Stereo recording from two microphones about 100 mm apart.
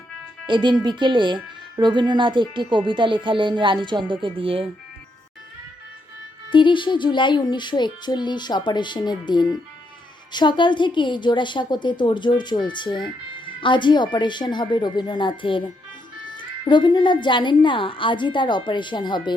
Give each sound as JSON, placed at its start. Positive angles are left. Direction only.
{"t": 0.4, "sound": "speech", "side_deg": -50}
{"t": 6.5, "sound": "a woman's voice", "side_deg": 55}